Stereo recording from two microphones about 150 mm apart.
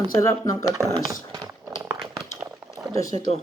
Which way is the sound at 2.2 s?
5° right (ahead or behind).